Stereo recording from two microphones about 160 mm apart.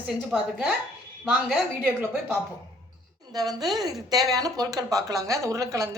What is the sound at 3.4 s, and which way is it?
A woman's voice, 25° right (ahead or behind).